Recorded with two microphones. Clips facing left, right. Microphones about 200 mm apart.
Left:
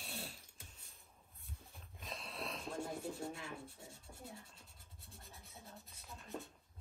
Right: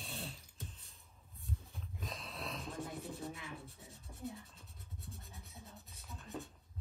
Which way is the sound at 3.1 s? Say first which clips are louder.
Even; 30° left (ahead or behind).